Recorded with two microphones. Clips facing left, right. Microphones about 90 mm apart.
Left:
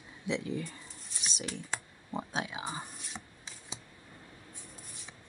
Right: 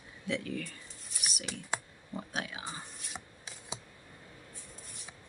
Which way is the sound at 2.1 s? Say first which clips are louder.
Left 3 dB; 20° left (ahead or behind).